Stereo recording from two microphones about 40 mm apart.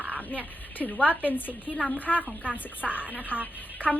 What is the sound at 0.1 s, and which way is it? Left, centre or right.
Speech, left.